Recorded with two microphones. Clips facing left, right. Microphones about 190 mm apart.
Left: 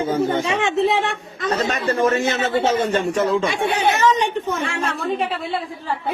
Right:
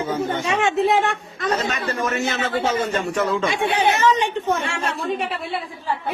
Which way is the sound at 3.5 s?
40° left (ahead or behind).